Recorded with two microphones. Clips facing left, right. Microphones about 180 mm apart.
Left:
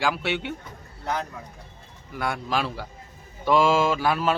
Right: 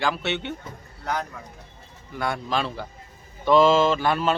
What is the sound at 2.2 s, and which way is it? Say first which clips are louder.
A man's voice: right 1 dB; 5° left (ahead or behind).